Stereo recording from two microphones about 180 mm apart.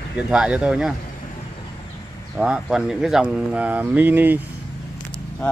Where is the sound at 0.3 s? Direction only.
5° right (ahead or behind).